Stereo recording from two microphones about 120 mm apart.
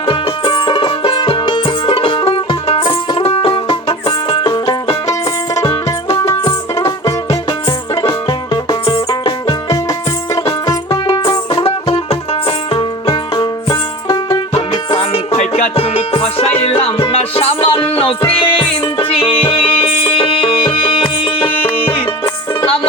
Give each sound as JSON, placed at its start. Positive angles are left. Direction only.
{"t": 0.0, "sound": "music", "side_deg": 40}
{"t": 8.0, "sound": "music", "side_deg": 40}
{"t": 11.6, "sound": "music", "side_deg": 50}
{"t": 14.9, "sound": "music", "side_deg": 55}